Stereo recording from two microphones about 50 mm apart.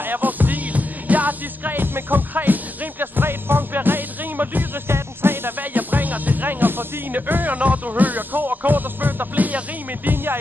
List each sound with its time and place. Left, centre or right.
0.0 s music: right
4.8 s music: right
10.0 s speech: right